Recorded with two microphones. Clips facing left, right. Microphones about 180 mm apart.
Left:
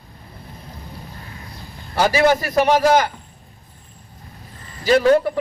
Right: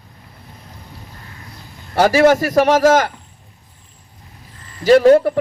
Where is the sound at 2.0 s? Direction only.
50° right (ahead or behind).